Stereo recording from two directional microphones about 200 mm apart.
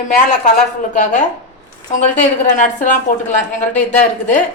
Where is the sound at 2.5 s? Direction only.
40° left (ahead or behind).